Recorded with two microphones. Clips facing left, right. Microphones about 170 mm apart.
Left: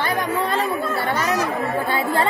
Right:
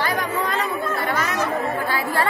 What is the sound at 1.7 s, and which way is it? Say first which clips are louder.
Chatter: left 2 dB; 25° left (ahead or behind).